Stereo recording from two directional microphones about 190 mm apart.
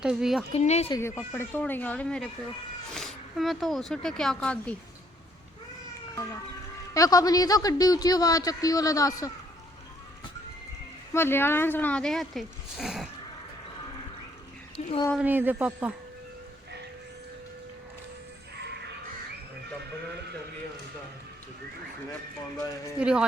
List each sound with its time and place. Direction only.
0.0 s speech: 5° right (ahead or behind)
0.5 s speech: 35° left (ahead or behind)
0.9 s a woman's voice: 15° left (ahead or behind)
6.9 s a man's voice: 20° left (ahead or behind)
11.1 s speech: 10° left (ahead or behind)
14.8 s speech: 35° left (ahead or behind)
15.2 s a woman's voice: 10° right (ahead or behind)
18.6 s a sound: 60° right (ahead or behind)
23.0 s speech: 5° right (ahead or behind)